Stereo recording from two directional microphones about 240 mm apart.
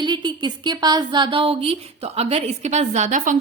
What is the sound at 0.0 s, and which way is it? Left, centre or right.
A woman's voice, centre.